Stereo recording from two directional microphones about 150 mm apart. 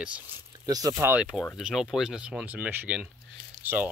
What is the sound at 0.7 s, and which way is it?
Speech, 25° right (ahead or behind).